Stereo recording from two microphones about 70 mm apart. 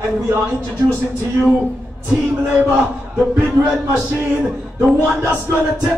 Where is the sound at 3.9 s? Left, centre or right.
Right.